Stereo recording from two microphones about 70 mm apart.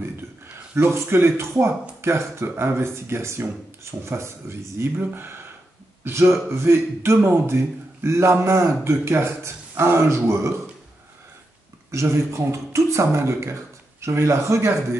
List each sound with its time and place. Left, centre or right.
0.0 s speech: right
11.9 s a man's voice: right